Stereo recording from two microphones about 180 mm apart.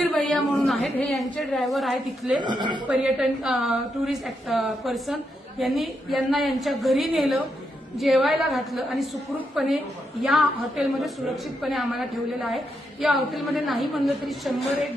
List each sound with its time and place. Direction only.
0.0 s a woman's voice: centre (ahead or behind)
2.4 s speech: 25° right (ahead or behind)
2.8 s a woman's voice: 5° right (ahead or behind)